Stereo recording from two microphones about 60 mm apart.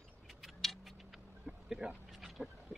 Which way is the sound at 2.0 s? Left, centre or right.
Centre.